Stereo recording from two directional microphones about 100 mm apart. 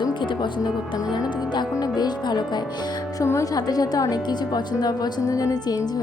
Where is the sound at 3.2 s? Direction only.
30° left (ahead or behind).